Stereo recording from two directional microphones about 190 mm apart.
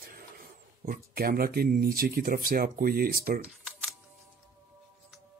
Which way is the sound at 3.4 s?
Centre (ahead or behind).